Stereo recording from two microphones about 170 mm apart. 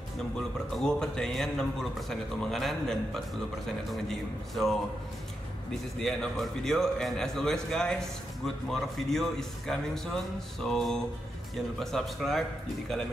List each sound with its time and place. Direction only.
0.7 s speech: 5° left (ahead or behind)
5.9 s speech: 5° left (ahead or behind)